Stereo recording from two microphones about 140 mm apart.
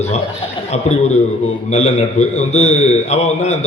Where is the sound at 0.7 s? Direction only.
55° left (ahead or behind).